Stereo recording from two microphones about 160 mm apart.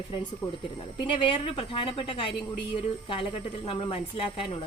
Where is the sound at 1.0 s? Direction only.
35° left (ahead or behind).